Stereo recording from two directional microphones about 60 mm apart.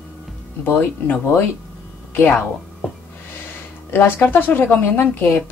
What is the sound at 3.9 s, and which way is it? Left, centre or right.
Speech, left.